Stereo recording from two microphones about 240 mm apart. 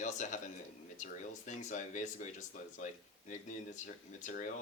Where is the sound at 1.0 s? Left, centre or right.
Left.